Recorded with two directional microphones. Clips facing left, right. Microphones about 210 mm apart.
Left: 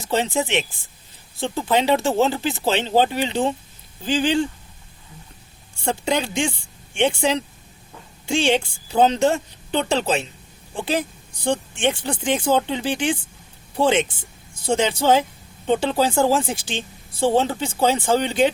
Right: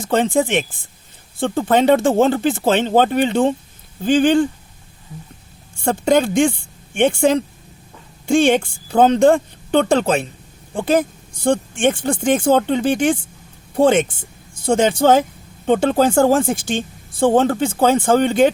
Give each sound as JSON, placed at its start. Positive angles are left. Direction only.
{"t": 0.0, "sound": "speech", "side_deg": -50}
{"t": 5.8, "sound": "speech", "side_deg": -50}